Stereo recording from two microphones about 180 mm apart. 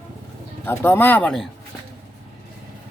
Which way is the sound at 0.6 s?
15° left (ahead or behind).